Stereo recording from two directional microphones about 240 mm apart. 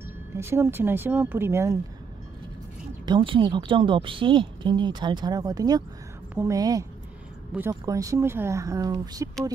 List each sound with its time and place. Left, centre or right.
0.4 s speech: centre
3.1 s a woman's voice: right